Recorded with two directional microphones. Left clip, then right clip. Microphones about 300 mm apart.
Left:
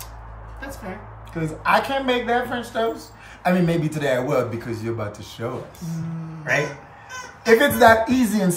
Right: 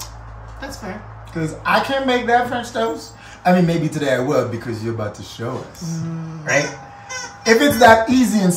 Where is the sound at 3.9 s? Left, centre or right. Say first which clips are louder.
Right 4 dB; centre.